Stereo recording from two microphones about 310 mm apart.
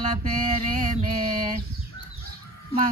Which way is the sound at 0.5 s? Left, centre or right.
Right.